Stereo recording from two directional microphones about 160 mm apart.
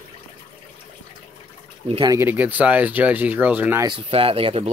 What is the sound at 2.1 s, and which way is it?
Speech, 10° right (ahead or behind).